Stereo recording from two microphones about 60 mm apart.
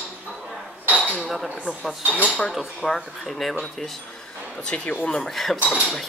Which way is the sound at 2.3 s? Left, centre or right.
Centre.